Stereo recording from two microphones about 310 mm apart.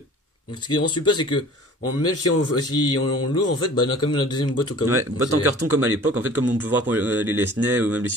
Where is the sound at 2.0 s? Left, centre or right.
Left.